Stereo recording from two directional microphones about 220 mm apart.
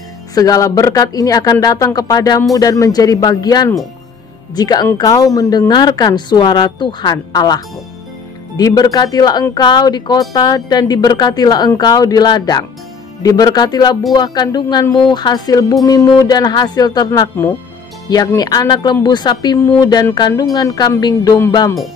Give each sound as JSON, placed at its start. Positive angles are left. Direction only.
{"t": 0.3, "sound": "speech", "side_deg": 15}